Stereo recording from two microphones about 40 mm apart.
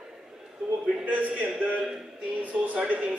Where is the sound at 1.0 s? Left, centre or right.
Right.